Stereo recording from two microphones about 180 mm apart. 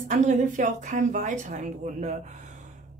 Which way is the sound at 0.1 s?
45° right (ahead or behind).